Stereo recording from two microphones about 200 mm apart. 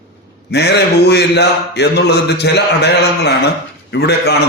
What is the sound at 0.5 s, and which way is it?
A man's voice, 55° left (ahead or behind).